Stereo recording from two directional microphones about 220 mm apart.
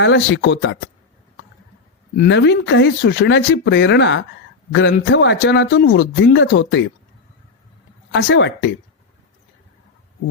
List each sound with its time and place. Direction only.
0.0 s speech: 55° left (ahead or behind)
2.1 s a man's voice: 50° left (ahead or behind)
8.1 s speech: 55° left (ahead or behind)